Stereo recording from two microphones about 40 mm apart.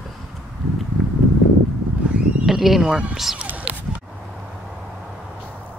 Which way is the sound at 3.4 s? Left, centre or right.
Right.